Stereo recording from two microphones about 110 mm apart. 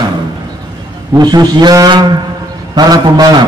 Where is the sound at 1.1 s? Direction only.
40° right (ahead or behind).